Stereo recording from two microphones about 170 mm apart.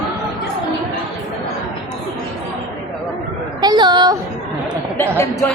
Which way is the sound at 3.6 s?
25° right (ahead or behind).